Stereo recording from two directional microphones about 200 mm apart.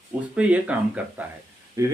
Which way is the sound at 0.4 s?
5° right (ahead or behind).